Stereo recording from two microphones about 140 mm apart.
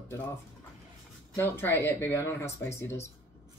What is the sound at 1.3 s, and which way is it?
Speech, 15° left (ahead or behind).